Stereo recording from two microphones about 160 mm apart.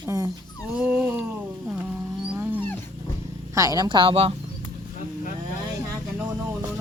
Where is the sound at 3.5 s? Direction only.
20° right (ahead or behind).